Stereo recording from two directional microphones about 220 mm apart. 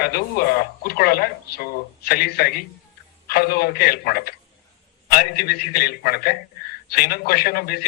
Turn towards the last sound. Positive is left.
turn(degrees=45)  # may be behind; listen again after turning